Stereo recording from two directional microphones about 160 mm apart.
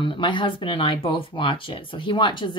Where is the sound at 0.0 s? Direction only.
30° left (ahead or behind).